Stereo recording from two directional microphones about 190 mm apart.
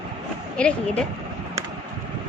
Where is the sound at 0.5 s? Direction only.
5° left (ahead or behind).